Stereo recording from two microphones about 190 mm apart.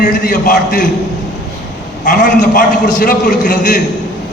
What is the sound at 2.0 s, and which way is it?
A man's voice, 45° left (ahead or behind).